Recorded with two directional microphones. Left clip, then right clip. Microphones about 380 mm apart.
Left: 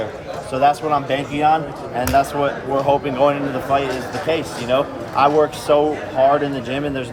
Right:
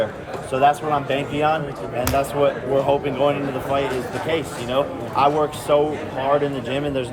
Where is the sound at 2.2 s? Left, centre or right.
Centre.